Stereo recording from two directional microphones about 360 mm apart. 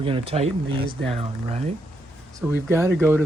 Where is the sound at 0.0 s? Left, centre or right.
Centre.